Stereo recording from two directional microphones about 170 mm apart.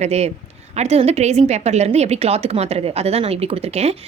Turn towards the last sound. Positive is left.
turn(degrees=-40)  # may be behind; listen again after turning